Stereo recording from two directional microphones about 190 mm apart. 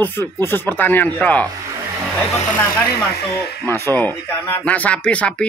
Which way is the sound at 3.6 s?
15° left (ahead or behind).